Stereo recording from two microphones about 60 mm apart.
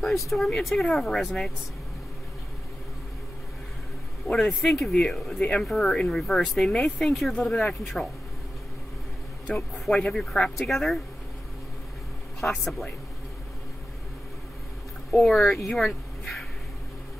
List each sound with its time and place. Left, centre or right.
0.0 s speech: centre
4.3 s speech: centre
5.7 s speech: centre
9.5 s speech: centre
12.4 s speech: centre
15.1 s speech: centre